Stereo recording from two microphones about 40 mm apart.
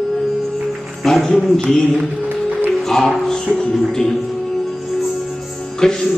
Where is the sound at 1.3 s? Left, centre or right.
Left.